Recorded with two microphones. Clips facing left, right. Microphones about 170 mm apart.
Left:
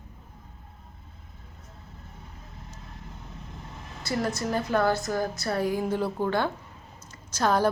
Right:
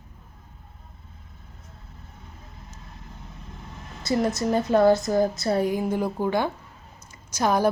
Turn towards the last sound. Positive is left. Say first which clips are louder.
# right 2 dB
turn(degrees=-10)  # may be behind; listen again after turning